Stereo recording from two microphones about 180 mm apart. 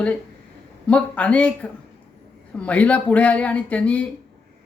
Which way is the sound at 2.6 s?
5° left (ahead or behind).